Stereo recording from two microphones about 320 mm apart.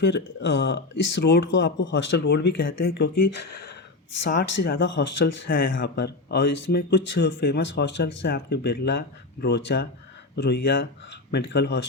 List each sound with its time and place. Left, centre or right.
0.0 s speech: left